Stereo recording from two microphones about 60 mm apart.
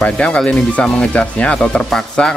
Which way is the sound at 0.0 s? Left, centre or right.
Centre.